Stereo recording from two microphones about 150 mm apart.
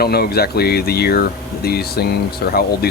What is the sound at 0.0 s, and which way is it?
Speech, 90° left.